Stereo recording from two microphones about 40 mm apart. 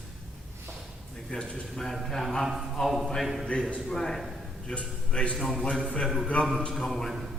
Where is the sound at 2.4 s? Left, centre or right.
Centre.